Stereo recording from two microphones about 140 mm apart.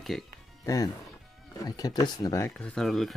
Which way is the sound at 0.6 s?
25° left (ahead or behind).